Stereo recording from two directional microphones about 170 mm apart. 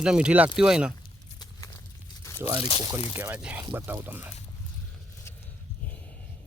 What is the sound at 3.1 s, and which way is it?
Speech, 10° right (ahead or behind).